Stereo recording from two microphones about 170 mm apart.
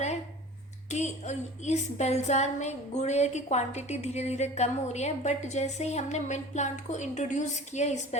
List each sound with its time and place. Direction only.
0.9 s a woman's voice: 40° left (ahead or behind)